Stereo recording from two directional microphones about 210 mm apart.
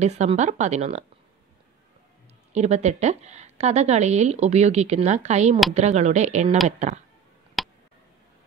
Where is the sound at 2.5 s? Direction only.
30° right (ahead or behind).